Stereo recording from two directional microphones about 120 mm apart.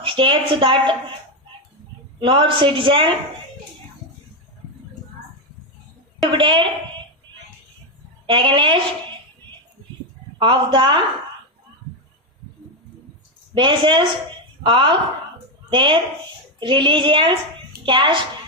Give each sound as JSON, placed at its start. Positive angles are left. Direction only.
{"t": 0.0, "sound": "a woman's voice", "side_deg": -45}
{"t": 2.1, "sound": "a woman's voice", "side_deg": -45}
{"t": 6.3, "sound": "a woman's voice", "side_deg": -45}
{"t": 8.3, "sound": "a woman's voice", "side_deg": -45}
{"t": 10.3, "sound": "a woman's voice", "side_deg": -45}
{"t": 13.5, "sound": "a woman's voice", "side_deg": -40}